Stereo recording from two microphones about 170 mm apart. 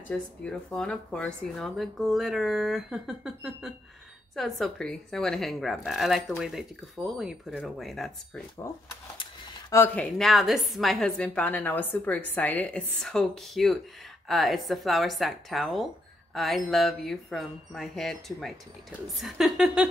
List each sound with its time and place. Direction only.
0.1 s a woman's voice: 5° left (ahead or behind)
9.2 s a sound: 20° left (ahead or behind)
9.9 s a woman's voice: centre (ahead or behind)